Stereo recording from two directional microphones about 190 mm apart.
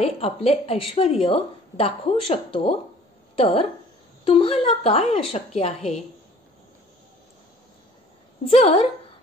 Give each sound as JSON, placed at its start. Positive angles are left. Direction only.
{"t": 0.0, "sound": "a woman's voice", "side_deg": 30}
{"t": 8.5, "sound": "speech", "side_deg": 30}